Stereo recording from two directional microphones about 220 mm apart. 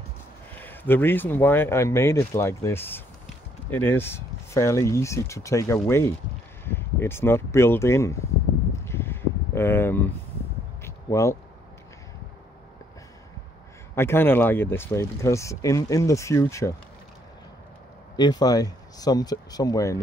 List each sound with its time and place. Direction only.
0.6 s speech: 10° left (ahead or behind)
8.8 s a sound: 10° left (ahead or behind)
13.9 s speech: 10° left (ahead or behind)
18.1 s speech: 20° left (ahead or behind)